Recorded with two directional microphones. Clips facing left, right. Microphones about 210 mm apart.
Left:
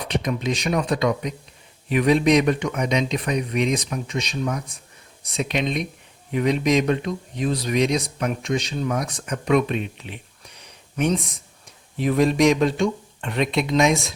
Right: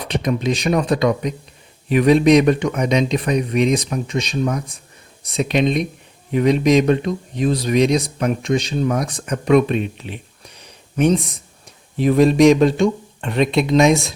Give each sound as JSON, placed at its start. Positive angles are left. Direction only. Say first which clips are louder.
{"t": 0.0, "sound": "speech", "louder": "right 4 dB", "side_deg": -35}